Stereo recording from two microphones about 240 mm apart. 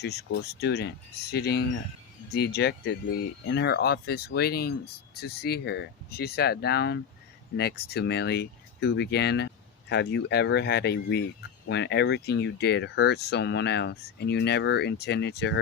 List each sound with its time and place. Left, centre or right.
0.0 s speech: left